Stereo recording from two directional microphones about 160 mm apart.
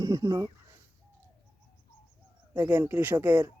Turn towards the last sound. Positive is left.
turn(degrees=-10)  # may be behind; listen again after turning